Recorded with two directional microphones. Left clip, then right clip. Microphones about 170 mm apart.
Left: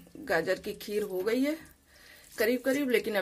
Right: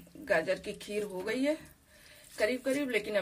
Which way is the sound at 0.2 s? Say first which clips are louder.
Left 1 dB; 90° left.